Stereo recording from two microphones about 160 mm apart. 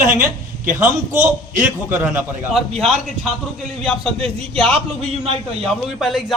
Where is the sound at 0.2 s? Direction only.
55° right (ahead or behind).